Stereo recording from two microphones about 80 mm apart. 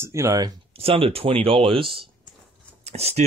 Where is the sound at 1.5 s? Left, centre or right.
Right.